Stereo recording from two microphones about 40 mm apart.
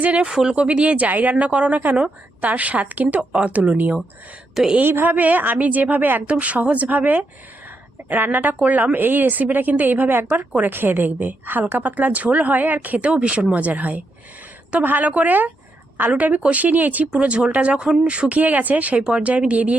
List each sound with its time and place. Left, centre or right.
0.0 s a woman's voice: right
0.3 s speech: centre
0.5 s a woman's voice: right
3.2 s speech: right
3.5 s a woman's voice: right
4.8 s a woman's voice: right
5.0 s a woman's voice: right
6.2 s a woman's voice: right
13.1 s a woman's voice: right
17.1 s a woman's voice: right
18.9 s a woman's voice: right